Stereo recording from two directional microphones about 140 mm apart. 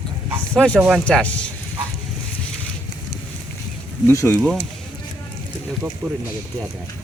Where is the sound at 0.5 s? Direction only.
10° left (ahead or behind).